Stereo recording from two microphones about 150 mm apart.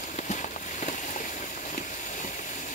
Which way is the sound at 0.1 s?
55° left (ahead or behind).